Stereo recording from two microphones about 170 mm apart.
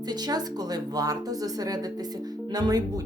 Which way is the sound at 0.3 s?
25° right (ahead or behind).